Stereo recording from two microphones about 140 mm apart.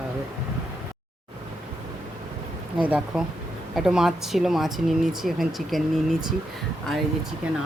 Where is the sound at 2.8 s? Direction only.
5° right (ahead or behind).